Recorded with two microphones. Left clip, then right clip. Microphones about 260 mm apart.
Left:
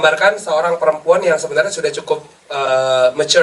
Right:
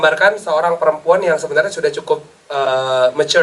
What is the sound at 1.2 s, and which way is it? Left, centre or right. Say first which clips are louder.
Speech: even; centre.